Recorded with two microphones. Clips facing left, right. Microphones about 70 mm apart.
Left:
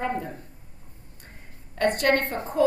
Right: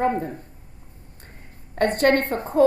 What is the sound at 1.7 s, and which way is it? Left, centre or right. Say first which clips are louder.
Speech: right 3 dB; right.